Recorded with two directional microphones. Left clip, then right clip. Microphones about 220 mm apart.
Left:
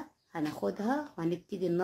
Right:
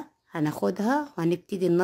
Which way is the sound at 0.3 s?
55° right (ahead or behind).